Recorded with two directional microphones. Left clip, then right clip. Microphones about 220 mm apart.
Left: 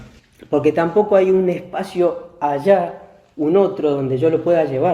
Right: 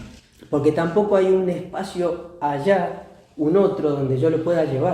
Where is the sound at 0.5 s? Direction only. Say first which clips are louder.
Left 4 dB; 25° left (ahead or behind).